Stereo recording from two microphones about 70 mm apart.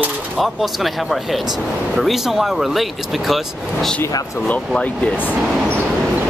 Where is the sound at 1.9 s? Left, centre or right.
Centre.